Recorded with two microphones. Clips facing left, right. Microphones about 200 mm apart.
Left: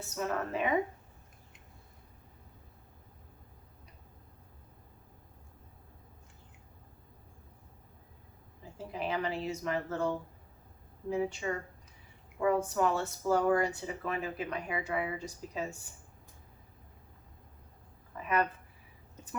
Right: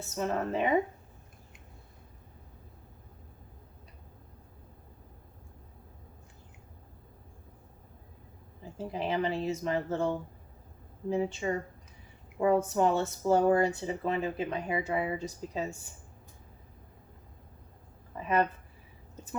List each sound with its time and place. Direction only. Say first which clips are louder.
0.2 s speech: right 3 dB; 25° right (ahead or behind)
8.9 s speech: right 3 dB; 25° right (ahead or behind)
11.1 s speech: right 3 dB; 25° right (ahead or behind)
18.1 s a sound: right 3 dB; 25° right (ahead or behind)